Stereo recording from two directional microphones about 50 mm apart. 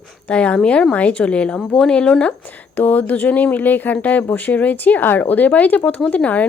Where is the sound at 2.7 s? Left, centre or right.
Left.